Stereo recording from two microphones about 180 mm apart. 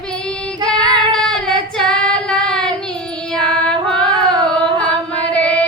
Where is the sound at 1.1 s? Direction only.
Centre (ahead or behind).